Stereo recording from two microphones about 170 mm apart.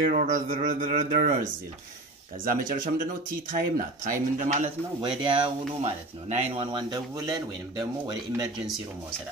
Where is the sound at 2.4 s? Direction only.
55° right (ahead or behind).